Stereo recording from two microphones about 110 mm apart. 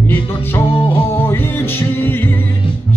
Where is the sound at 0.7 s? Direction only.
50° left (ahead or behind).